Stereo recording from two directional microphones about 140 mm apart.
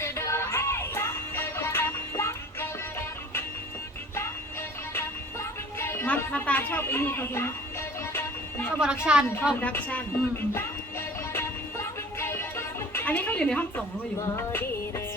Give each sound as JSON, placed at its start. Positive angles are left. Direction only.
{"t": 0.0, "sound": "music", "side_deg": 20}
{"t": 4.9, "sound": "music", "side_deg": 15}
{"t": 8.8, "sound": "a woman's voice", "side_deg": -5}
{"t": 9.6, "sound": "speech", "side_deg": 10}
{"t": 11.3, "sound": "music", "side_deg": 15}